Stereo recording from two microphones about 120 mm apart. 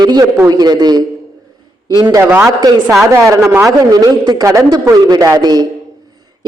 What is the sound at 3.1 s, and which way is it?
A man's voice, 25° right (ahead or behind).